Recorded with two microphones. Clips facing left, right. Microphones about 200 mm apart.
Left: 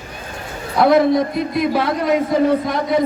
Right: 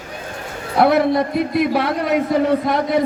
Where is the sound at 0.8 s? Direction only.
60° right (ahead or behind).